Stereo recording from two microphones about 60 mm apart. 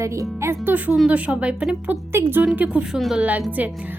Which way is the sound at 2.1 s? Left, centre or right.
Right.